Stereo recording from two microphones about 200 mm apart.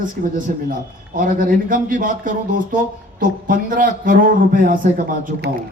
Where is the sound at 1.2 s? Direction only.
45° right (ahead or behind).